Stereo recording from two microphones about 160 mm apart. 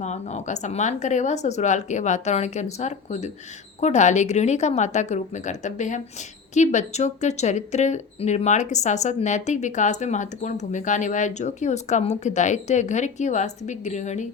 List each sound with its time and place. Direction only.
0.0 s speech: 45° left (ahead or behind)